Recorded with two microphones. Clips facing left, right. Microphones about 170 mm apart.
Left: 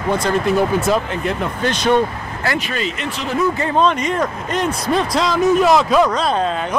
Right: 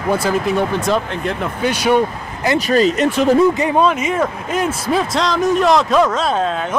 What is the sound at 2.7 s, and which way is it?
Speech, 40° right (ahead or behind).